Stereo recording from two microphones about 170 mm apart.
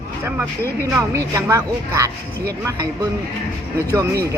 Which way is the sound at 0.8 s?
15° right (ahead or behind).